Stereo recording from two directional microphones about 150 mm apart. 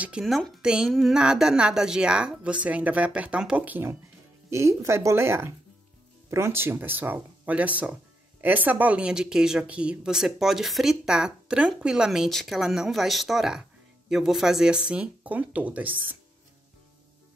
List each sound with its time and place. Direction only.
0.0 s speech: 5° right (ahead or behind)